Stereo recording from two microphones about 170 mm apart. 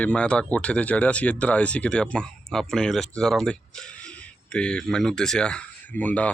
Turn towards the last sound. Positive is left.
turn(degrees=10)  # may be behind; listen again after turning